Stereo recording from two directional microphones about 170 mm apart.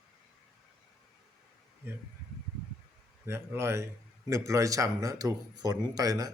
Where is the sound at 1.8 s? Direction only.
10° right (ahead or behind).